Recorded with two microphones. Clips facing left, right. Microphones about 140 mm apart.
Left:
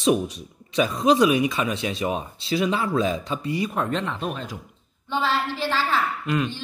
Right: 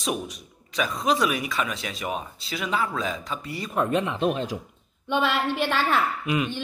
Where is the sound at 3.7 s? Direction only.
10° right (ahead or behind).